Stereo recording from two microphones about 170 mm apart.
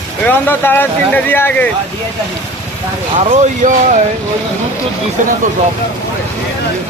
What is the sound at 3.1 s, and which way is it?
Speech, 45° right (ahead or behind).